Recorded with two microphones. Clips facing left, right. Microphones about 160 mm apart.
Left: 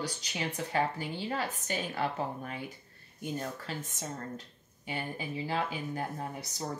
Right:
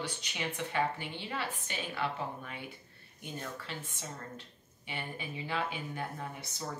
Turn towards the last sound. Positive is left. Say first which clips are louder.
# left 3 dB
turn(degrees=35)  # may be behind; listen again after turning